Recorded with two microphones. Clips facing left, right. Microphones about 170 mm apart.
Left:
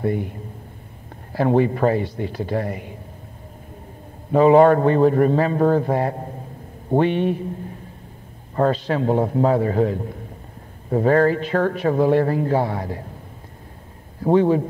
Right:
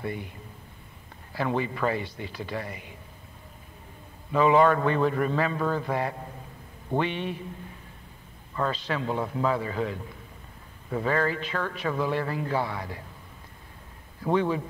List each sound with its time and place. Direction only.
0.0 s a man's voice: 45° left (ahead or behind)
4.3 s a man's voice: 45° left (ahead or behind)
8.5 s a man's voice: 50° left (ahead or behind)
14.2 s a man's voice: 35° left (ahead or behind)